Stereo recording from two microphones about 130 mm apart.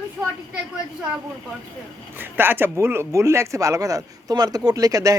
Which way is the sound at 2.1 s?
15° right (ahead or behind).